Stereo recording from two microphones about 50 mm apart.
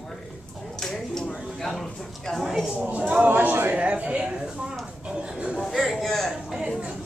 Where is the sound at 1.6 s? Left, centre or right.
Centre.